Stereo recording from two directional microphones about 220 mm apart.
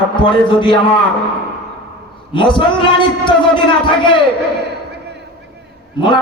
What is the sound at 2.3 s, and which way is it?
A man's voice, 20° left (ahead or behind).